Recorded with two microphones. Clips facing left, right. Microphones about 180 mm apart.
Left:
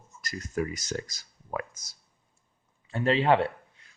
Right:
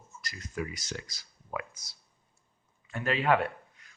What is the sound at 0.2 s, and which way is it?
Speech, 45° left (ahead or behind).